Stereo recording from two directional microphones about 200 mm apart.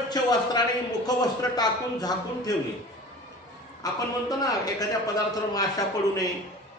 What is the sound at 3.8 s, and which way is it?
A man's voice, 20° left (ahead or behind).